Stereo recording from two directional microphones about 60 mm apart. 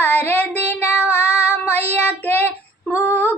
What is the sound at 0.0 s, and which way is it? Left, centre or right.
Child singing, left.